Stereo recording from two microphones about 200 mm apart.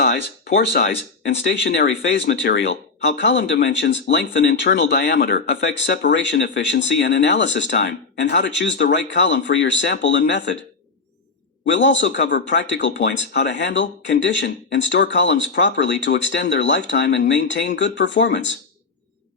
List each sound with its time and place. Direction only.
0.0 s a sound: 50° left (ahead or behind)
0.8 s speech: 60° left (ahead or behind)
11.6 s speech: 65° left (ahead or behind)